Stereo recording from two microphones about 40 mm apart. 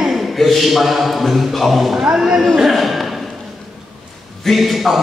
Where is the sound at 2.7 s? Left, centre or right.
Centre.